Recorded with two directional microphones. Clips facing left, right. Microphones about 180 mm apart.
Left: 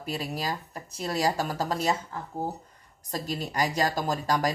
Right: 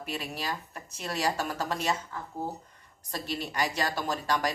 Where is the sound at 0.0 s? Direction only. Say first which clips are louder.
Left 3 dB; 40° left (ahead or behind).